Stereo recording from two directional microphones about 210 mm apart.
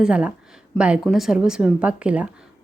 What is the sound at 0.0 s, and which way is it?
A woman's voice, 5° right (ahead or behind).